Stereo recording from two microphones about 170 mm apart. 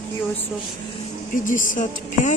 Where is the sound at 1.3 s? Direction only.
50° left (ahead or behind).